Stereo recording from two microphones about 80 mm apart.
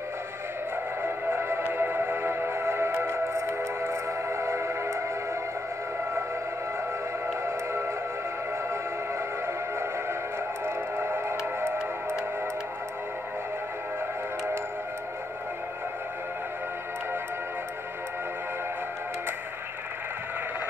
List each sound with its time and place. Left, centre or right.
1.0 s music: right
7.4 s music: right
9.5 s music: right